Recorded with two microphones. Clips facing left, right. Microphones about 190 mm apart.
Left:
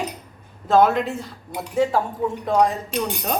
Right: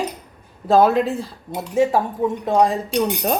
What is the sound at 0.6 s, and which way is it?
A woman's voice, 35° right (ahead or behind).